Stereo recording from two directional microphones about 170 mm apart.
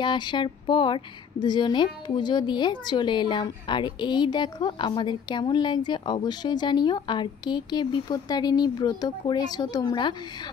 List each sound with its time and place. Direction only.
0.0 s speech: 25° left (ahead or behind)